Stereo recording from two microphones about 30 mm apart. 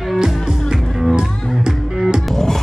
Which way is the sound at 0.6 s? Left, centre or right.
Centre.